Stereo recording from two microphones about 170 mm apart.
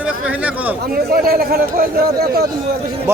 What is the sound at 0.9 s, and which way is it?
A man's voice, 60° right (ahead or behind).